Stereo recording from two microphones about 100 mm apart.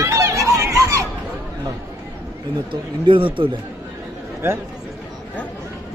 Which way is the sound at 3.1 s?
60° right (ahead or behind).